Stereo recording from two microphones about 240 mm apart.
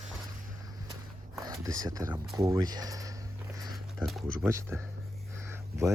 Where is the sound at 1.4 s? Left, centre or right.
Centre.